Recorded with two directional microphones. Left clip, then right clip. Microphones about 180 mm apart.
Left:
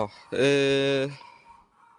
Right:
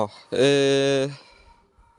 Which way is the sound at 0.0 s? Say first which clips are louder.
Right 4 dB; 25° right (ahead or behind).